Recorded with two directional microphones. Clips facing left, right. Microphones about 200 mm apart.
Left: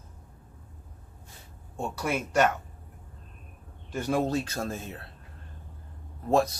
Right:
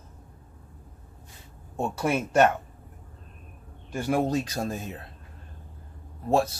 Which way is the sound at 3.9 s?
10° right (ahead or behind).